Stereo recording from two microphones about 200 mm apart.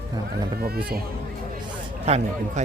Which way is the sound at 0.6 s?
50° right (ahead or behind).